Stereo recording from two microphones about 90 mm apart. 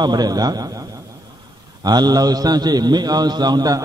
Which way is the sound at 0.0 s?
50° right (ahead or behind).